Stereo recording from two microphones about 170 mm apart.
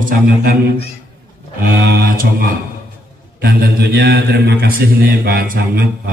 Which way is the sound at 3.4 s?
65° right (ahead or behind).